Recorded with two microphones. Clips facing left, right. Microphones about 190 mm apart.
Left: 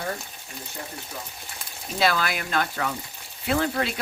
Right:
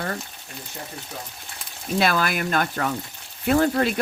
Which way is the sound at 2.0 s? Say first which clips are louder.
Right 1 dB; 50° right (ahead or behind).